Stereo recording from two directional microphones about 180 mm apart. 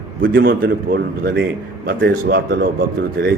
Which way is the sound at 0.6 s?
55° right (ahead or behind).